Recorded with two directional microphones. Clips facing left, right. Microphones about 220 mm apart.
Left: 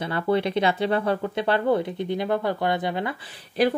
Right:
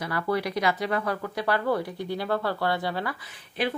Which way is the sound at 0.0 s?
25° left (ahead or behind).